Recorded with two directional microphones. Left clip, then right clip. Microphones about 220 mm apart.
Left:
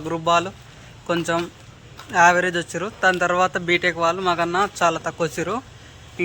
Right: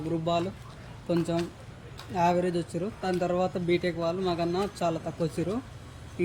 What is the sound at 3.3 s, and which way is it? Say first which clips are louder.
Speech: left 9 dB; 30° left (ahead or behind).